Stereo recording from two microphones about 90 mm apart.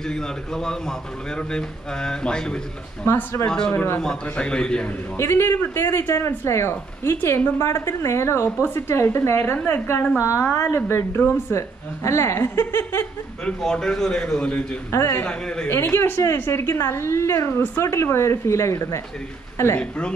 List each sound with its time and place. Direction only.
0.1 s a man's voice: 5° left (ahead or behind)
3.1 s a man's voice: 30° left (ahead or behind)
3.4 s a man's voice: 10° left (ahead or behind)
3.7 s a man's voice: 25° left (ahead or behind)
4.0 s a man's voice: 10° left (ahead or behind)
5.1 s a man's voice: 30° left (ahead or behind)
10.2 s a woman's voice: 30° left (ahead or behind)
13.5 s a man's voice: 5° left (ahead or behind)
14.9 s a woman's voice: 30° left (ahead or behind)
15.2 s a man's voice: 10° left (ahead or behind)
15.7 s a man's voice: 30° left (ahead or behind)
19.8 s a man's voice: 15° left (ahead or behind)